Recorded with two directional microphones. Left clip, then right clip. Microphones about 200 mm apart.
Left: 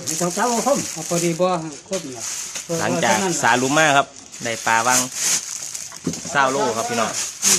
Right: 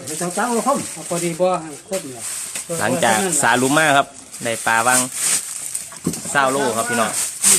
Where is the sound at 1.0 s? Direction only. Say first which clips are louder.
Right 1 dB; 50° left (ahead or behind).